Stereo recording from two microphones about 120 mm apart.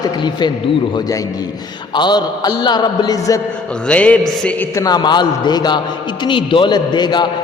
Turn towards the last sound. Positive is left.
turn(degrees=35)  # may be behind; listen again after turning